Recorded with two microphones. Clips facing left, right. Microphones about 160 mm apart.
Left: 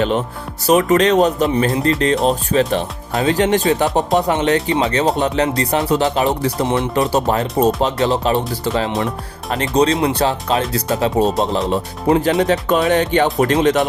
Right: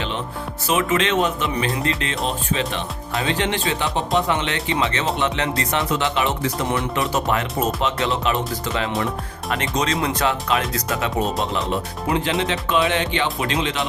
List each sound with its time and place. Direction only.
0.7 s speech: 40° left (ahead or behind)